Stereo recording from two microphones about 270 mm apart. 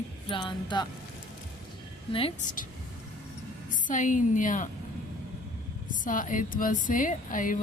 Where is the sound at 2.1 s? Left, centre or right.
Left.